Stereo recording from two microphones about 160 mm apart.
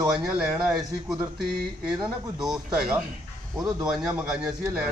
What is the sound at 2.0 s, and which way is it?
Speech, 25° right (ahead or behind).